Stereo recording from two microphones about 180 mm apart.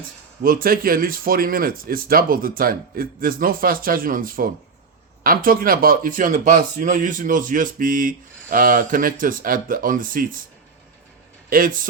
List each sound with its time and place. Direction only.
0.4 s a man's voice: 55° right (ahead or behind)
11.4 s speech: 50° right (ahead or behind)